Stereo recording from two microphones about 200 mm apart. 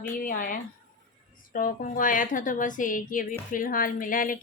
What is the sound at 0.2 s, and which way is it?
A woman's voice, 45° left (ahead or behind).